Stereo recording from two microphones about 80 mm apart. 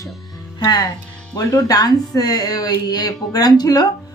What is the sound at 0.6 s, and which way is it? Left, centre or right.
Speech, left.